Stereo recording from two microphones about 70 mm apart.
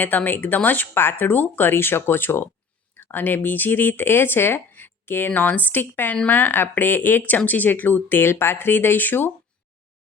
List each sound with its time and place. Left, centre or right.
0.0 s speech: left